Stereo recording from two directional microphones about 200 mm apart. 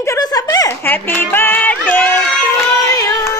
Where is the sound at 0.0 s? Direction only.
15° left (ahead or behind).